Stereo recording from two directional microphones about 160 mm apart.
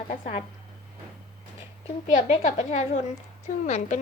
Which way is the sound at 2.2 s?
45° left (ahead or behind).